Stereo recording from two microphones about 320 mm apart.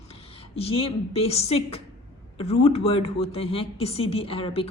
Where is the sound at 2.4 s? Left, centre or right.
Centre.